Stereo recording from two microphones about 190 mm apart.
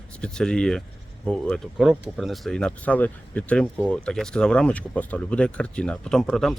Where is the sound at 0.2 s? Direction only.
5° left (ahead or behind).